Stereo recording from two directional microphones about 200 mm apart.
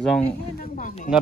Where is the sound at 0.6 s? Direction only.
40° left (ahead or behind).